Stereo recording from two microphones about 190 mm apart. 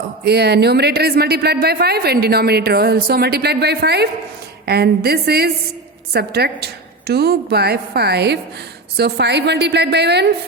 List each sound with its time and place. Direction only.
0.3 s speech: 60° right (ahead or behind)